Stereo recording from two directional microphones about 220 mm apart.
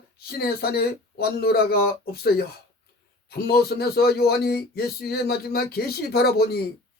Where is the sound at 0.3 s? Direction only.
45° left (ahead or behind).